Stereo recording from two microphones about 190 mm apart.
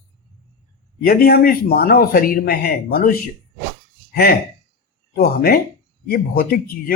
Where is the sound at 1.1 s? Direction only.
50° left (ahead or behind).